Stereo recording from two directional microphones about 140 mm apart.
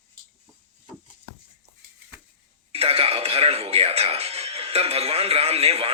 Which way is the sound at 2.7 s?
45° right (ahead or behind).